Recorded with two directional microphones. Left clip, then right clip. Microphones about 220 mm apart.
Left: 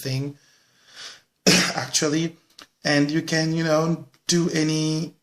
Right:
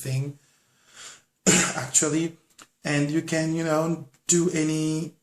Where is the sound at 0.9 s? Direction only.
40° left (ahead or behind).